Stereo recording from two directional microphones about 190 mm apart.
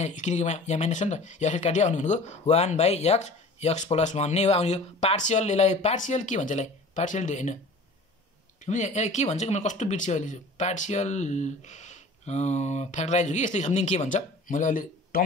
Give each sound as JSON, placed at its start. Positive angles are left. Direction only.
{"t": 0.0, "sound": "speech", "side_deg": 40}
{"t": 8.6, "sound": "speech", "side_deg": 40}